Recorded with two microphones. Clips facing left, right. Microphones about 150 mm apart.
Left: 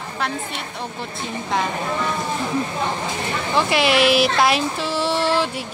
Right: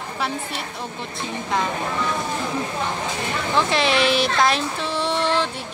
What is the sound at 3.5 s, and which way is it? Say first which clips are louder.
Child singing: left 2 dB; 5° left (ahead or behind).